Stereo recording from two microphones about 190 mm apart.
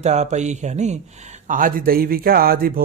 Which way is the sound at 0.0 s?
35° right (ahead or behind).